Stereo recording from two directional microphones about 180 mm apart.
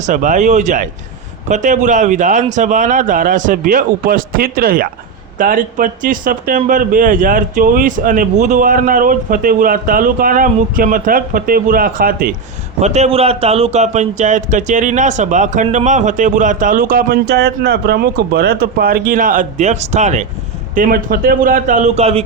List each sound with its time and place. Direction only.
0.0 s a man's voice: 45° right (ahead or behind)
12.8 s a man's voice: 35° right (ahead or behind)
20.7 s a man's voice: 50° right (ahead or behind); by 22.2 s 35° right (ahead or behind)